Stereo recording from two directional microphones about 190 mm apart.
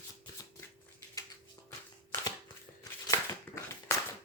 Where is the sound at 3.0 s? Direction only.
15° left (ahead or behind).